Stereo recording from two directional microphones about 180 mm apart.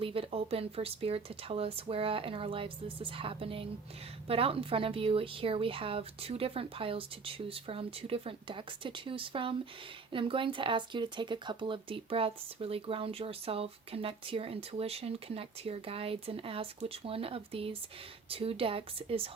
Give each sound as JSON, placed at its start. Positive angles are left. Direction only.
{"t": 0.0, "sound": "speech", "side_deg": -30}